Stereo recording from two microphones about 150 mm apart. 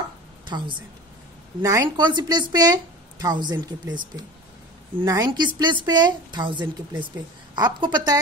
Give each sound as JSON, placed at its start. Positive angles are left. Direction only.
{"t": 0.5, "sound": "a woman's voice", "side_deg": -30}
{"t": 1.6, "sound": "a woman's voice", "side_deg": -20}